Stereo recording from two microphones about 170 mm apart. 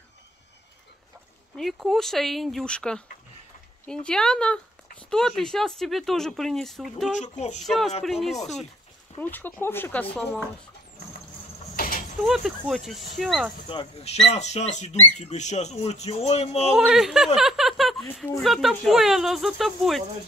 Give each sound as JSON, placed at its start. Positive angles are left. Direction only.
{"t": 1.6, "sound": "speech", "side_deg": 0}
{"t": 7.1, "sound": "speech", "side_deg": 45}
{"t": 7.6, "sound": "speech", "side_deg": 0}
{"t": 9.2, "sound": "speech", "side_deg": 10}
{"t": 11.7, "sound": "a sound", "side_deg": 55}
{"t": 12.3, "sound": "speech", "side_deg": 0}
{"t": 13.7, "sound": "speech", "side_deg": 35}
{"t": 16.7, "sound": "speech", "side_deg": 0}
{"t": 17.4, "sound": "chuckle", "side_deg": 0}
{"t": 18.4, "sound": "speech", "side_deg": 0}